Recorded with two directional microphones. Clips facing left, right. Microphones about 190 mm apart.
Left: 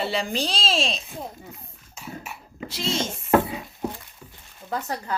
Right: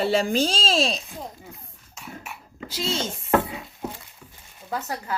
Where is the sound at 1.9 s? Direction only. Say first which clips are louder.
Left 2 dB; centre (ahead or behind).